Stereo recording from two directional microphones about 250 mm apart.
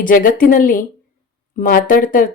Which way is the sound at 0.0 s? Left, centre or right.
Left.